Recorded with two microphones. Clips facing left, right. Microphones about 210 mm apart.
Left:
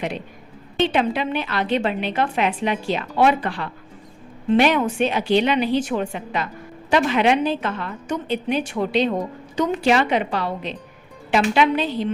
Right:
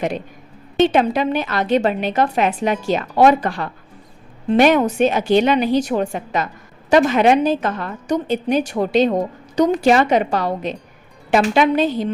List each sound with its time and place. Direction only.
0.9 s a woman's voice: 45° right (ahead or behind)